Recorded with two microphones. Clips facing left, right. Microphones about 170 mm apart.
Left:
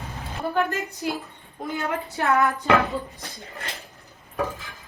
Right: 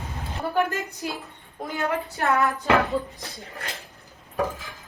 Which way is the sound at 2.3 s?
Centre (ahead or behind).